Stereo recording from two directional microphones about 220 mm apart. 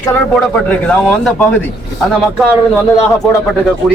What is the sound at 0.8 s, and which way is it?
Speech, 5° left (ahead or behind).